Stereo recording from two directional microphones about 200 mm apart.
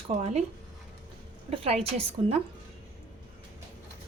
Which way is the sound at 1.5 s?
30° right (ahead or behind).